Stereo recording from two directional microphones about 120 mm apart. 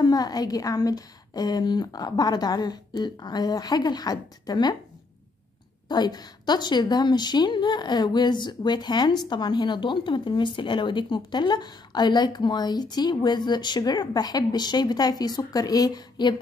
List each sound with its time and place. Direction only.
0.0 s a woman's voice: 35° left (ahead or behind)
5.9 s a woman's voice: 35° left (ahead or behind)